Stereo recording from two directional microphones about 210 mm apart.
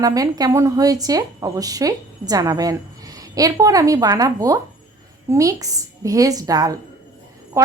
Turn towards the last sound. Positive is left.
turn(degrees=-15)  # may be behind; listen again after turning